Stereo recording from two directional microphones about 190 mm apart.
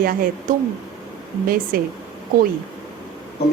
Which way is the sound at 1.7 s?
50° right (ahead or behind).